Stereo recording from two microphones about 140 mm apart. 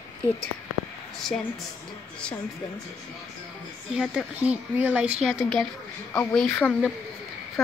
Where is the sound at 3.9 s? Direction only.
5° right (ahead or behind).